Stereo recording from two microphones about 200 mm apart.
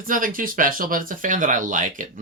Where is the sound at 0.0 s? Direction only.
40° right (ahead or behind).